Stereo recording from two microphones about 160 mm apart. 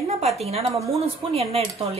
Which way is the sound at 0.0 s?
40° right (ahead or behind).